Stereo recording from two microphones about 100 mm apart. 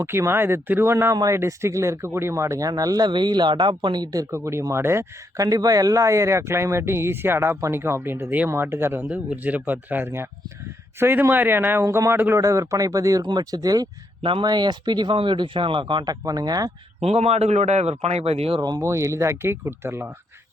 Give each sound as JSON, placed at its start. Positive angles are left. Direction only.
{"t": 0.0, "sound": "speech", "side_deg": -25}
{"t": 1.1, "sound": "speech", "side_deg": -35}
{"t": 4.3, "sound": "speech", "side_deg": -30}
{"t": 14.2, "sound": "speech", "side_deg": -65}
{"t": 14.4, "sound": "speech", "side_deg": -45}
{"t": 16.2, "sound": "speech", "side_deg": -40}
{"t": 17.0, "sound": "a man's voice", "side_deg": -90}
{"t": 18.8, "sound": "speech", "side_deg": -30}